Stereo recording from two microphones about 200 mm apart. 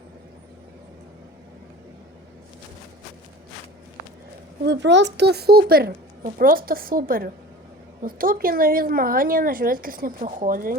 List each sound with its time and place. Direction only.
4.6 s speech: 60° right (ahead or behind); by 10.8 s 45° right (ahead or behind)